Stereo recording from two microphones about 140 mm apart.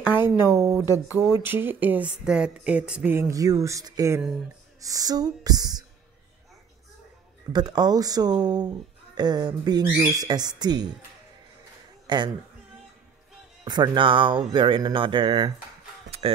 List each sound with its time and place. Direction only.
0.0 s speech: 15° right (ahead or behind)
7.5 s speech: 30° right (ahead or behind)
12.1 s speech: 35° right (ahead or behind)
13.7 s speech: 30° right (ahead or behind)